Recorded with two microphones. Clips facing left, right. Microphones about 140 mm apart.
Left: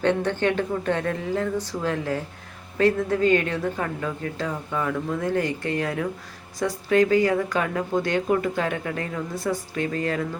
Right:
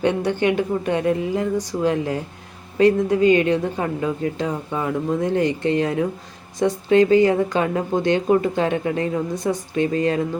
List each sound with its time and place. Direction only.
0.0 s a woman's voice: 15° right (ahead or behind)